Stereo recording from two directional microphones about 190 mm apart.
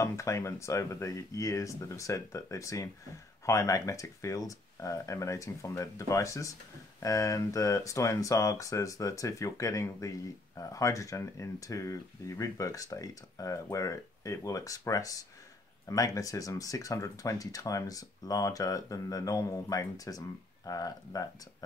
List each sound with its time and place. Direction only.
0.0 s speech: 15° left (ahead or behind)